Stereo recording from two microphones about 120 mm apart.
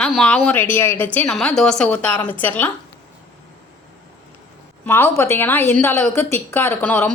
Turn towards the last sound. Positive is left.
turn(degrees=15)  # may be behind; listen again after turning